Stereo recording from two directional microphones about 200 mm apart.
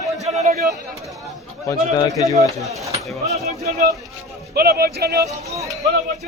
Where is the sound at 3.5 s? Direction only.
35° right (ahead or behind).